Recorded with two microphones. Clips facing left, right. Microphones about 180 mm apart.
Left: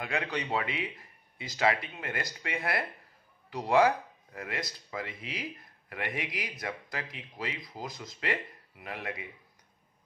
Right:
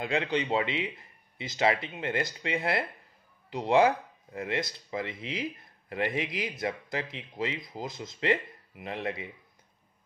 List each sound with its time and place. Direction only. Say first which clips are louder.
0.0 s speech: right 5 dB; 25° right (ahead or behind)